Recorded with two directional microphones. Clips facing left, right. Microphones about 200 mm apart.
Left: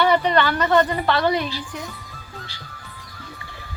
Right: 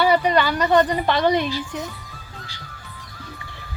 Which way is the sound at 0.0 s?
10° right (ahead or behind).